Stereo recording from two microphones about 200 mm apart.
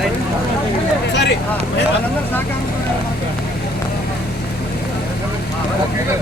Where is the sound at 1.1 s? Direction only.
60° left (ahead or behind).